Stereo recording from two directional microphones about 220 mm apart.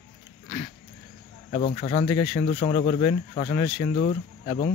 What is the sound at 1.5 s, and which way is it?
Speech, 25° left (ahead or behind).